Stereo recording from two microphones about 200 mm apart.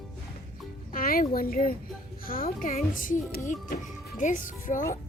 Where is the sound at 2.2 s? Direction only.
45° left (ahead or behind).